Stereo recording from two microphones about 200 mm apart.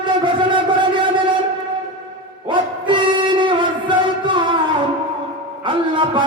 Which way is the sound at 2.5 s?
25° right (ahead or behind).